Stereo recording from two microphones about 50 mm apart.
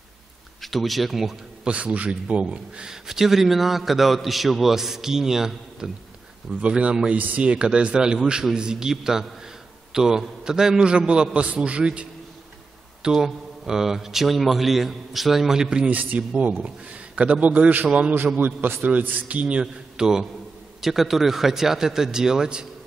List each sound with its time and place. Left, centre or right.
0.6 s speech: centre
1.6 s a man's voice: right
3.1 s a man's voice: centre
6.6 s a man's voice: right
13.0 s a man's voice: centre
15.9 s a man's voice: right
18.4 s a man's voice: right
18.9 s a man's voice: right; by 22.7 s centre